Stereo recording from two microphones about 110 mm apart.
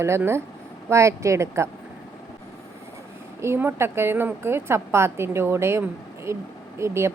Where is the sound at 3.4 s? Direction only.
20° right (ahead or behind).